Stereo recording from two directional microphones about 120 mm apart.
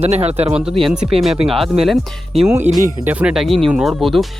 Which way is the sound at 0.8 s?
Centre (ahead or behind).